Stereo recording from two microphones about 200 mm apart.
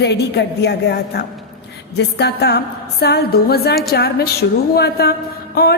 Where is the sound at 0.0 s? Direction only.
55° left (ahead or behind).